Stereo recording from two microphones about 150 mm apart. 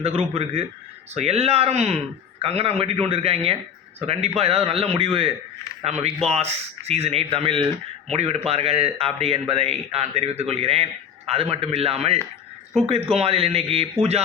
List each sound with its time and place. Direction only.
0.0 s a man's voice: 40° right (ahead or behind)